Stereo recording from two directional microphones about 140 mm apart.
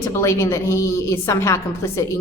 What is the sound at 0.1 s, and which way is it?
A woman's voice, 20° left (ahead or behind).